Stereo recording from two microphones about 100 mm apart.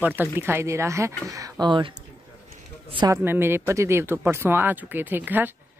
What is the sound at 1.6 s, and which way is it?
Speech, 55° right (ahead or behind).